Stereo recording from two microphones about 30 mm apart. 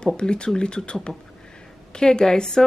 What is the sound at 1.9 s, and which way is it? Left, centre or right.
Speech, left.